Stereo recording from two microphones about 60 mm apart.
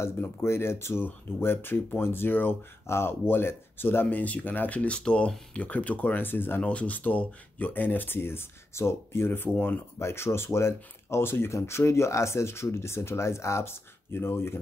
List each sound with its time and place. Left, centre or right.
0.2 s speech: left
4.2 s speech: left
6.6 s speech: left
9.9 s speech: left